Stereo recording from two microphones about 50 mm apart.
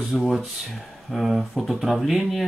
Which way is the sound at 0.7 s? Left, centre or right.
Centre.